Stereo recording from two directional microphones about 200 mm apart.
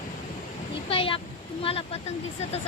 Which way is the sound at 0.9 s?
25° left (ahead or behind).